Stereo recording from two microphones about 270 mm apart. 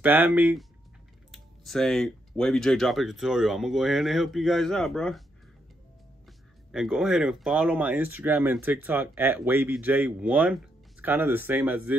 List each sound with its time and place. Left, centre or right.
0.0 s speech: centre
6.2 s speech: centre